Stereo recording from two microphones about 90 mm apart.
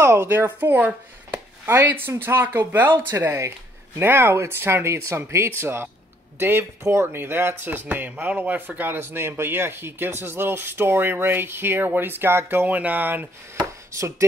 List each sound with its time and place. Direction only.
0.0 s speech: 30° right (ahead or behind)
3.1 s speech: 30° right (ahead or behind)